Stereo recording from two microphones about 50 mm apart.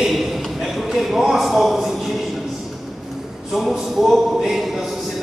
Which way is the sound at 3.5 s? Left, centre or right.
Centre.